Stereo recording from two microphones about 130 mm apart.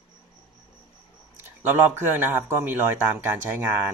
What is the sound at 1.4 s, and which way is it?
Speech, 15° right (ahead or behind).